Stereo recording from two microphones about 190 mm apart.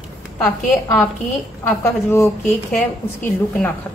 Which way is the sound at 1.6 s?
10° left (ahead or behind).